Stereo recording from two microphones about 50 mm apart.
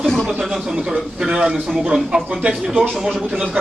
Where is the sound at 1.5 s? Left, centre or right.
Centre.